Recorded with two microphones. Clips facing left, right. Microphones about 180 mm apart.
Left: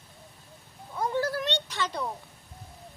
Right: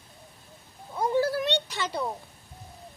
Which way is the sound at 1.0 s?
10° right (ahead or behind).